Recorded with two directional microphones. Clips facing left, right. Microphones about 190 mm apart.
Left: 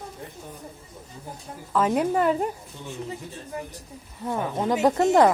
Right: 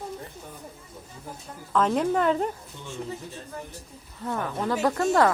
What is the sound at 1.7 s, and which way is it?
Speech, 10° left (ahead or behind).